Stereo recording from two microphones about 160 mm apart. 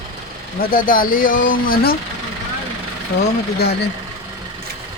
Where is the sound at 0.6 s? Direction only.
60° left (ahead or behind).